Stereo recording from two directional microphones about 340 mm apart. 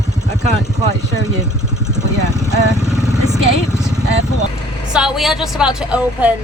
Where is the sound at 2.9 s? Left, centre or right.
Centre.